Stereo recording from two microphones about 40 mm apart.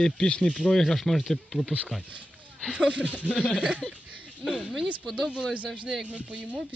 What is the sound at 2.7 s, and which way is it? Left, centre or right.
Speech, right.